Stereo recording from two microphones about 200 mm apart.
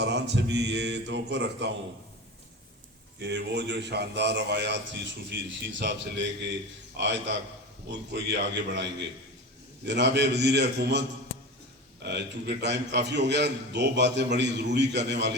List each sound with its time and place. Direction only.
0.0 s a man's voice: 60° right (ahead or behind)
3.2 s a man's voice: 60° right (ahead or behind)
12.0 s a man's voice: 55° right (ahead or behind)